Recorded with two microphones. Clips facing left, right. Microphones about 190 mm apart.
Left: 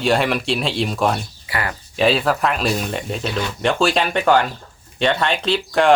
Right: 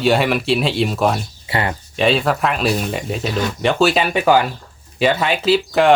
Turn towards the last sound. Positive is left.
turn(degrees=-5)  # may be behind; listen again after turning